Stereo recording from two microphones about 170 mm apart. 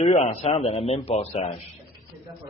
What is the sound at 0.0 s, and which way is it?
A man's voice, 40° left (ahead or behind).